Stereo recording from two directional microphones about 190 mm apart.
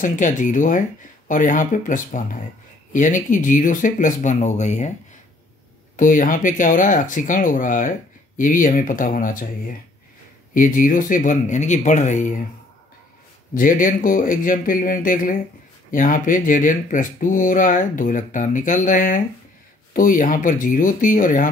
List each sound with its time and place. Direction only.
0.0 s speech: 45° left (ahead or behind)
5.9 s speech: 45° left (ahead or behind)
13.6 s speech: 45° left (ahead or behind)